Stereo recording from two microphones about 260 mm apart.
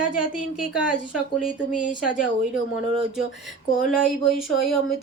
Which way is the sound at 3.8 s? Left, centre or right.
Left.